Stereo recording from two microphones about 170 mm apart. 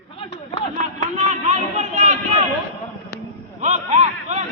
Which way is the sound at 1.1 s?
40° right (ahead or behind).